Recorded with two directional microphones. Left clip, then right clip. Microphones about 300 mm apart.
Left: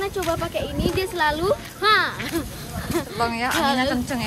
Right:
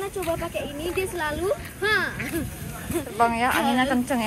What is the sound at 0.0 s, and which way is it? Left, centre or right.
Speech, centre.